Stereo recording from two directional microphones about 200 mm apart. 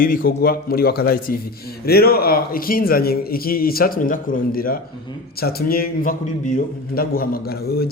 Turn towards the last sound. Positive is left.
turn(degrees=50)  # may be behind; listen again after turning